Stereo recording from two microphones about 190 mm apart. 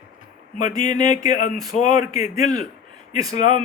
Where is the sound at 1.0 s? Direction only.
20° right (ahead or behind).